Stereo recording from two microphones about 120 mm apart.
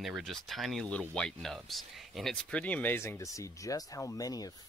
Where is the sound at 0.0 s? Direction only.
Centre (ahead or behind).